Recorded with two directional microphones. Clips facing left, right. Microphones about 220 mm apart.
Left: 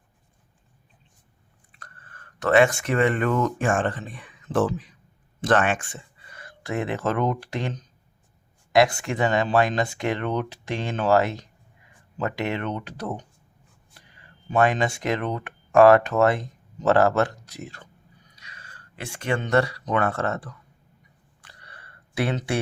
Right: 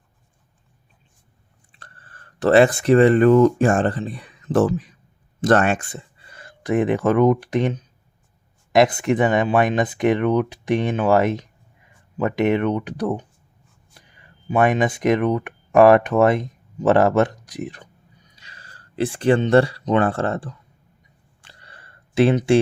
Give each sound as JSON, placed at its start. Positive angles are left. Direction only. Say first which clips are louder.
{"t": 1.7, "sound": "speech", "louder": "right 1 dB", "side_deg": -30}
{"t": 5.4, "sound": "a sound", "louder": "right 4 dB", "side_deg": -40}
{"t": 6.6, "sound": "speech", "louder": "right 8 dB", "side_deg": -20}
{"t": 8.7, "sound": "speech", "louder": "right 4 dB", "side_deg": -20}
{"t": 14.4, "sound": "speech", "louder": "right 3 dB", "side_deg": -15}
{"t": 18.3, "sound": "speech", "louder": "right 1 dB", "side_deg": -30}
{"t": 21.4, "sound": "a sound", "louder": "right 1 dB", "side_deg": -25}